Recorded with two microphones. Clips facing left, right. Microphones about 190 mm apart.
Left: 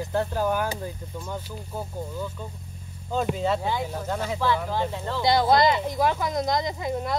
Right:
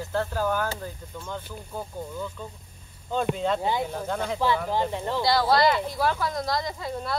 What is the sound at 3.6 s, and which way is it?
Speech, 15° right (ahead or behind).